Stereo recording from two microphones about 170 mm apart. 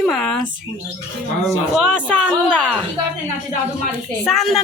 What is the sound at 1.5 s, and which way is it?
Speech, centre (ahead or behind).